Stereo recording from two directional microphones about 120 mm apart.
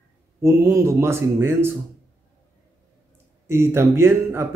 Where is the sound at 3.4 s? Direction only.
20° right (ahead or behind).